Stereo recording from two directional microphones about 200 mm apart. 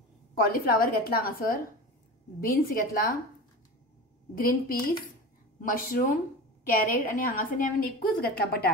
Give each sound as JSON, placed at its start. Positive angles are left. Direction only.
{"t": 0.3, "sound": "a woman's voice", "side_deg": 45}
{"t": 4.4, "sound": "a woman's voice", "side_deg": 45}